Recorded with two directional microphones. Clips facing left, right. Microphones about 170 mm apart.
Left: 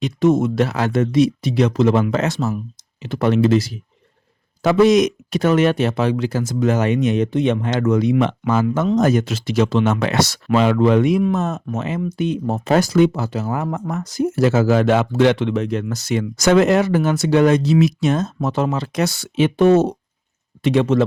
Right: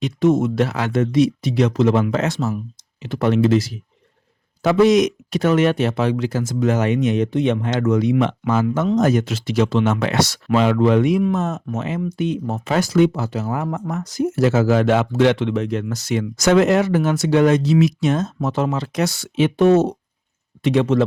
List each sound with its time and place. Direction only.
0.0 s speech: 40° left (ahead or behind)